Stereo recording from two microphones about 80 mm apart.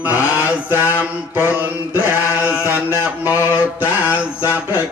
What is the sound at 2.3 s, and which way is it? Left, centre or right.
Chant, centre.